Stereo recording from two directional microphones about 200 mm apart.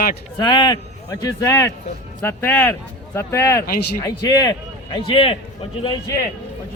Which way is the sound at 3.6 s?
50° left (ahead or behind).